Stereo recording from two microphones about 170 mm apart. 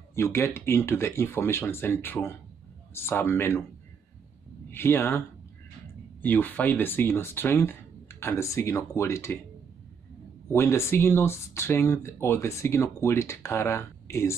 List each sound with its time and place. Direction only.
0.1 s speech: 15° left (ahead or behind)
4.6 s speech: 15° left (ahead or behind)
6.2 s speech: 10° left (ahead or behind)
10.5 s speech: 15° left (ahead or behind)